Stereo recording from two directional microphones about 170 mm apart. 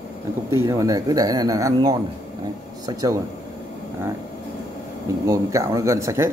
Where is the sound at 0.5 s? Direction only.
15° right (ahead or behind).